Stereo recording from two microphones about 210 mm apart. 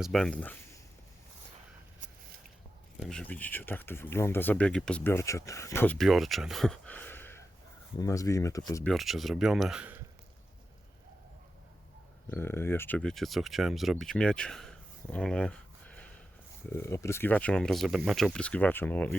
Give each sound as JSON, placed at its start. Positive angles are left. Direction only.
{"t": 0.0, "sound": "speech", "side_deg": 0}
{"t": 3.0, "sound": "speech", "side_deg": 5}
{"t": 8.9, "sound": "speech", "side_deg": 0}
{"t": 12.3, "sound": "speech", "side_deg": 10}